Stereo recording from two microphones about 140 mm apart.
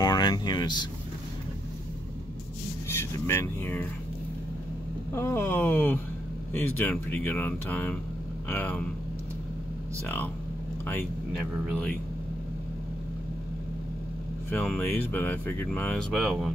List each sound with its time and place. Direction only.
0.0 s speech: 30° left (ahead or behind)
3.0 s speech: 15° left (ahead or behind)
5.1 s speech: 15° left (ahead or behind)
10.0 s speech: 15° left (ahead or behind)
11.7 s speech: 5° left (ahead or behind)
14.5 s speech: 10° left (ahead or behind)